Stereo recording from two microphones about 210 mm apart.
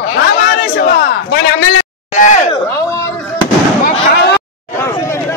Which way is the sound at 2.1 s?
35° left (ahead or behind).